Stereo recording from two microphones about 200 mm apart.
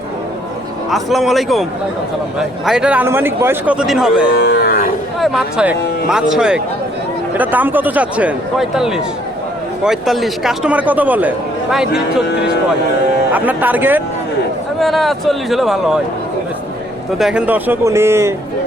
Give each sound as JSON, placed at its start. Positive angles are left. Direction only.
{"t": 0.9, "sound": "a man's voice", "side_deg": 0}
{"t": 4.4, "sound": "livestock", "side_deg": 55}
{"t": 5.2, "sound": "a man's voice", "side_deg": 0}
{"t": 13.3, "sound": "a man's voice", "side_deg": -10}
{"t": 17.2, "sound": "a man's voice", "side_deg": -5}